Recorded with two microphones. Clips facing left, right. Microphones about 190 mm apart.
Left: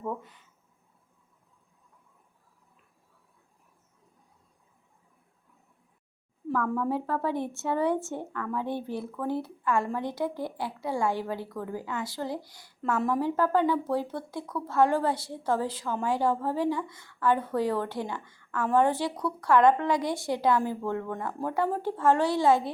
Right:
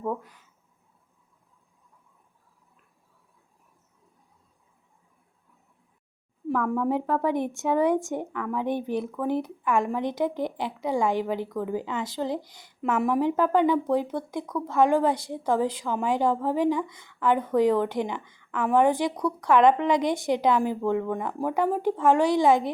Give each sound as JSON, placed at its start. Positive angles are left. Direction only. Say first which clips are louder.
{"t": 6.5, "sound": "a woman's voice", "louder": "right 3 dB", "side_deg": -15}